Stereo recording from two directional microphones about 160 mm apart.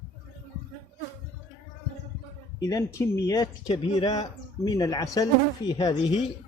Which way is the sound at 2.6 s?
20° left (ahead or behind).